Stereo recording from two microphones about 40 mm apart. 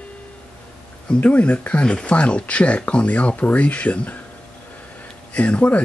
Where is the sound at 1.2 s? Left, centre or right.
Left.